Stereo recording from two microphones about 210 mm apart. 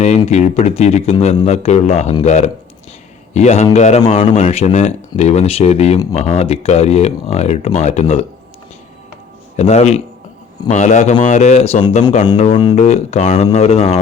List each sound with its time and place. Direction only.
0.3 s a man's voice: 30° left (ahead or behind)
9.6 s a man's voice: 30° left (ahead or behind)
12.5 s speech: 20° left (ahead or behind)
12.8 s a man's voice: 30° left (ahead or behind)